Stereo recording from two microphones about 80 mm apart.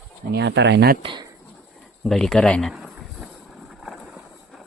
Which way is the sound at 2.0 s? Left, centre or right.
Centre.